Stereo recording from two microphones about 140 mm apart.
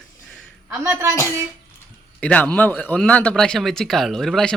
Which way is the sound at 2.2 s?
10° left (ahead or behind).